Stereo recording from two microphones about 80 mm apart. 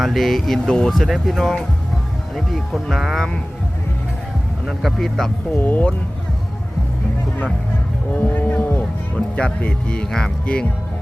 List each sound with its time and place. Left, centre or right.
0.0 s speech: centre
4.6 s speech: centre
5.5 s speech: left
8.1 s boat: left
9.1 s speech: centre